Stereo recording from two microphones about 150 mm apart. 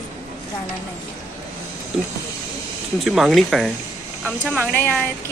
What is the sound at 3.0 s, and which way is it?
Speech, centre (ahead or behind).